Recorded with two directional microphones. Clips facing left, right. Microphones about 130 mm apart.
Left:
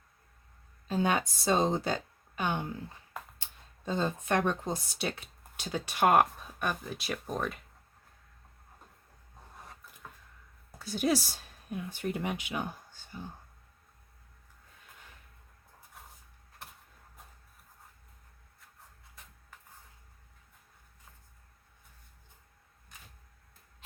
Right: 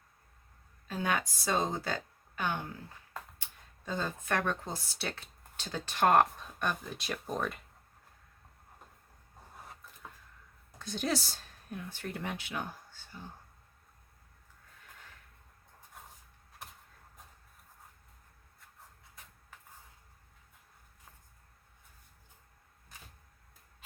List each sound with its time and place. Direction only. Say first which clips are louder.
0.9 s speech: left 4 dB; 25° left (ahead or behind)
3.8 s speech: left 4 dB; 25° left (ahead or behind); by 7.6 s centre (ahead or behind)
10.8 s speech: left 4 dB; 10° left (ahead or behind)
16.6 s a sound: even; centre (ahead or behind)